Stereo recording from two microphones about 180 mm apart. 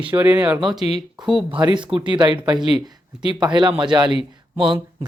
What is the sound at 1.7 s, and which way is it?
Speech, 25° right (ahead or behind).